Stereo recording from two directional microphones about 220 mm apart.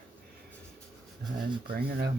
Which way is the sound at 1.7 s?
45° right (ahead or behind).